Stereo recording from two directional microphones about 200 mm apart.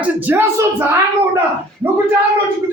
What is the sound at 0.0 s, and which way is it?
Speech, 10° right (ahead or behind).